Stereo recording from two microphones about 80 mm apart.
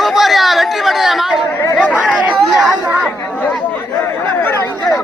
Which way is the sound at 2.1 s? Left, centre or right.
Centre.